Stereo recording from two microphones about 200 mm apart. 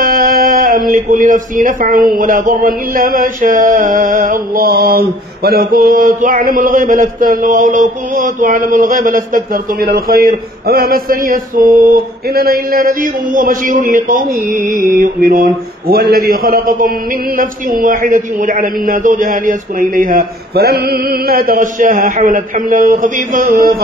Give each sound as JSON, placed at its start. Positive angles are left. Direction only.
{"t": 0.0, "sound": "speech", "side_deg": -45}